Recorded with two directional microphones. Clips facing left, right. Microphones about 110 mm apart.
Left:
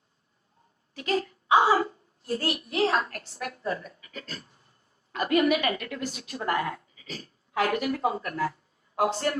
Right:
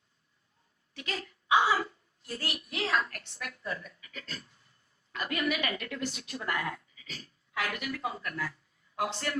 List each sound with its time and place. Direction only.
0.9 s a woman's voice: 40° left (ahead or behind)